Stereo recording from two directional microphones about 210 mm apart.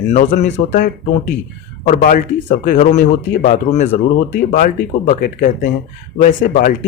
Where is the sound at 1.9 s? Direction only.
40° left (ahead or behind).